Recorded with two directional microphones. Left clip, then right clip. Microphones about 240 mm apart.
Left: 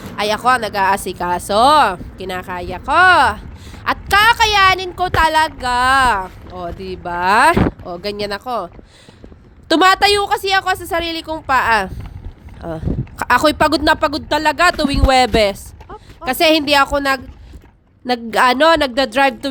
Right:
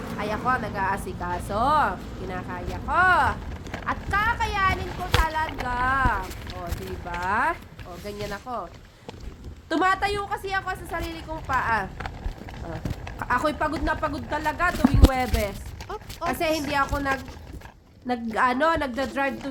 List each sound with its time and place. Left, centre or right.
0.2 s speech: left
9.6 s speech: left